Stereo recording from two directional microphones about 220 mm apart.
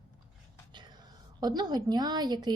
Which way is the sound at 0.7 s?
20° right (ahead or behind).